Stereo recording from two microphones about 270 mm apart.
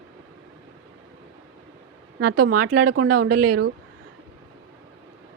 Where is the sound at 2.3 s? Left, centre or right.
Right.